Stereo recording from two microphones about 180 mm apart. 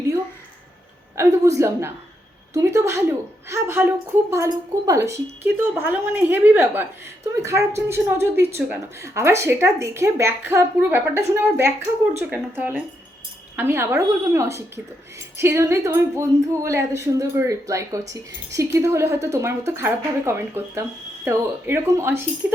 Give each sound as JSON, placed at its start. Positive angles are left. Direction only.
{"t": 1.1, "sound": "a woman's voice", "side_deg": -15}